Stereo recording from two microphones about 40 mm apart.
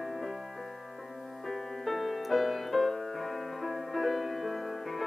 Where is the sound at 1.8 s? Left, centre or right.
Centre.